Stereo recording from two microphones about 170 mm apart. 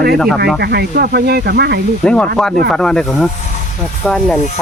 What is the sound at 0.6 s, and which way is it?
Speech, 75° right (ahead or behind).